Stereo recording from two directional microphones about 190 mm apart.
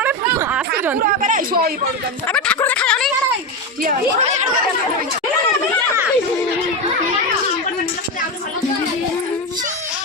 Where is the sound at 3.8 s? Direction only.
40° right (ahead or behind).